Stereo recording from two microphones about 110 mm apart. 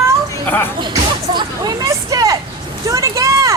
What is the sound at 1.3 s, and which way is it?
Speech, 40° right (ahead or behind).